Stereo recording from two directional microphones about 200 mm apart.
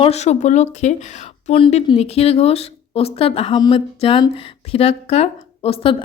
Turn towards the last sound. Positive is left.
turn(degrees=25)  # may be behind; listen again after turning